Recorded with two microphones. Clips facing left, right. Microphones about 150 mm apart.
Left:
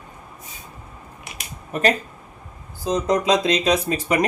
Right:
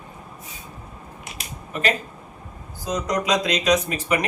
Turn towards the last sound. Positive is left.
turn(degrees=35)  # may be behind; listen again after turning